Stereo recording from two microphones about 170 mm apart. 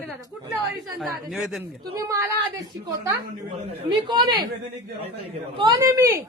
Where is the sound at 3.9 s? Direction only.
25° right (ahead or behind).